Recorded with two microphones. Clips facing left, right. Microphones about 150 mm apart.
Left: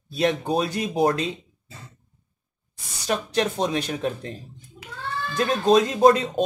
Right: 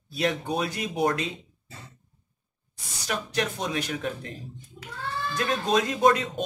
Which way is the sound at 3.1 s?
30° left (ahead or behind).